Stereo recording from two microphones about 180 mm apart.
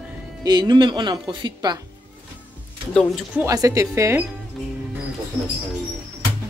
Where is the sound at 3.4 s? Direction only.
20° right (ahead or behind).